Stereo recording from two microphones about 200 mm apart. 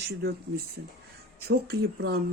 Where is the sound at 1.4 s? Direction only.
50° right (ahead or behind).